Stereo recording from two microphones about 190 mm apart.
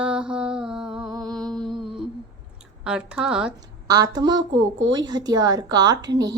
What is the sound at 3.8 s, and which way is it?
A woman's voice, 20° right (ahead or behind).